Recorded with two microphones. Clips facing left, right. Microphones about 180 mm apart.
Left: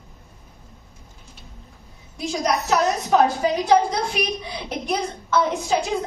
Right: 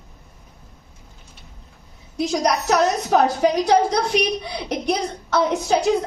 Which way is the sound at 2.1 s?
75° right (ahead or behind).